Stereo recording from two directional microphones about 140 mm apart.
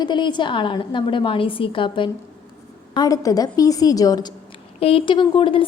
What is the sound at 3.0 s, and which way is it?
A woman's voice, 25° left (ahead or behind).